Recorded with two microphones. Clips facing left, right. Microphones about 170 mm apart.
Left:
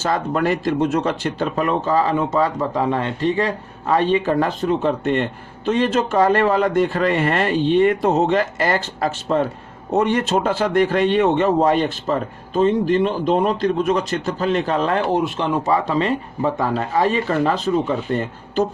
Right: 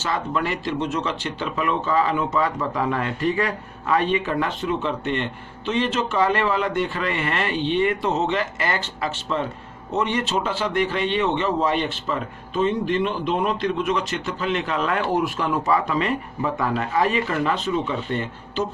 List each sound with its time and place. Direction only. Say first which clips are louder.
0.0 s speech: left 5 dB; 45° left (ahead or behind)